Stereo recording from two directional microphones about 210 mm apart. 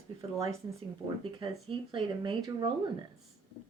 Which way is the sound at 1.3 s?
25° right (ahead or behind).